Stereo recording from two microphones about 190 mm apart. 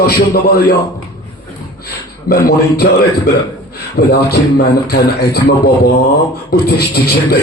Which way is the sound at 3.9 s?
55° left (ahead or behind).